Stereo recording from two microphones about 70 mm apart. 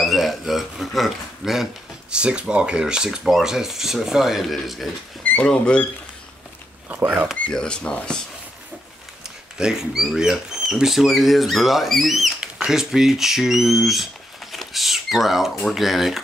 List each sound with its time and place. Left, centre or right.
0.0 s speech: centre
5.4 s speech: centre
6.9 s speech: right
7.4 s speech: centre
9.6 s speech: centre